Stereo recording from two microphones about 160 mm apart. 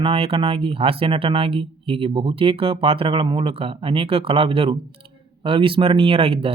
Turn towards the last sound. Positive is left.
turn(degrees=-35)  # may be behind; listen again after turning